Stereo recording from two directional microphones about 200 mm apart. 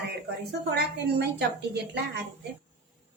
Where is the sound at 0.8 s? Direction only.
55° right (ahead or behind).